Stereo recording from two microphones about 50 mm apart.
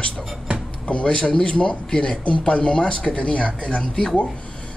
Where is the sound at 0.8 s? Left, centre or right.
Left.